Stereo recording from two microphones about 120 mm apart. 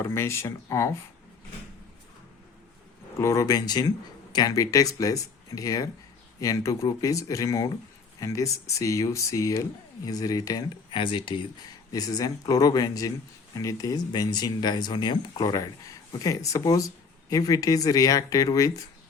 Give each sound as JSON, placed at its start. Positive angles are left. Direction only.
{"t": 0.0, "sound": "speech", "side_deg": 20}
{"t": 3.2, "sound": "speech", "side_deg": 25}
{"t": 10.9, "sound": "speech", "side_deg": 45}
{"t": 11.9, "sound": "speech", "side_deg": 30}